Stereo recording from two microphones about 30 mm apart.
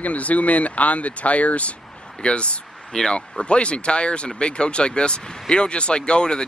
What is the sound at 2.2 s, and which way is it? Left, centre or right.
Speech, left.